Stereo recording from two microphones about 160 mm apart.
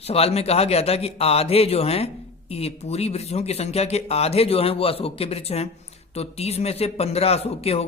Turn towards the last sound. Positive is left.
turn(degrees=40)  # may be behind; listen again after turning